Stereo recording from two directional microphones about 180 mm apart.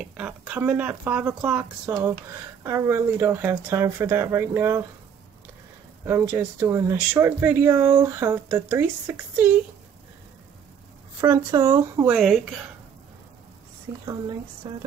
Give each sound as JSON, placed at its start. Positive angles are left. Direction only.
{"t": 0.0, "sound": "speech", "side_deg": -10}
{"t": 6.0, "sound": "speech", "side_deg": -15}
{"t": 11.1, "sound": "speech", "side_deg": -15}
{"t": 13.9, "sound": "speech", "side_deg": -15}